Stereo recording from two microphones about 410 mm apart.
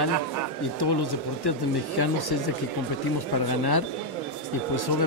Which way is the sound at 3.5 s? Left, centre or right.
Left.